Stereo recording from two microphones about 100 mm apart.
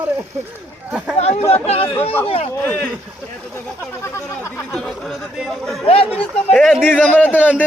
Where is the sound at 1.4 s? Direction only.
90° left.